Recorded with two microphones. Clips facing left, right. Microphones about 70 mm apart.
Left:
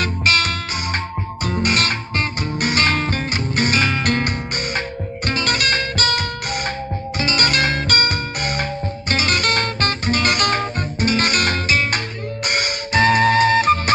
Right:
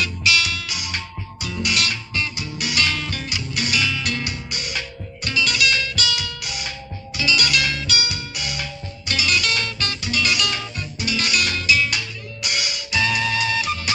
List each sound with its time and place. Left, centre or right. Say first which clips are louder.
0.0 s music: left 3 dB; left